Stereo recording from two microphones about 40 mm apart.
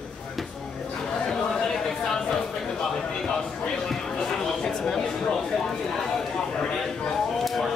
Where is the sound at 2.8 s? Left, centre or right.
Centre.